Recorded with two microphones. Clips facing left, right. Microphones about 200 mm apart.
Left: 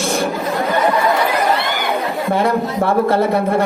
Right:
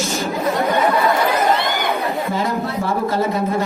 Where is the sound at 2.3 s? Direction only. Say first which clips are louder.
Left 5 dB; 60° left (ahead or behind).